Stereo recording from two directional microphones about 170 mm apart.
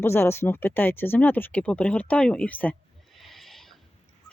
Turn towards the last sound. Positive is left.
turn(degrees=0)  # may be behind; listen again after turning